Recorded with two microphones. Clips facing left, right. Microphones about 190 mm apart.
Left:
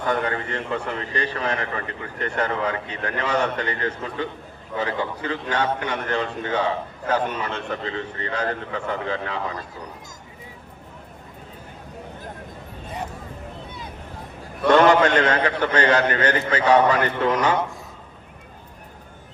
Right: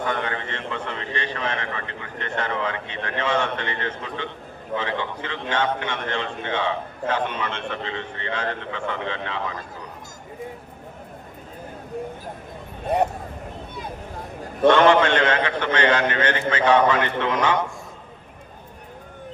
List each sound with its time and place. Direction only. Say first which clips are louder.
0.1 s a man's voice: left 3 dB; 40° left (ahead or behind)
12.9 s speech: right 12 dB; 65° right (ahead or behind)
14.7 s a man's voice: left 1 dB; 40° left (ahead or behind)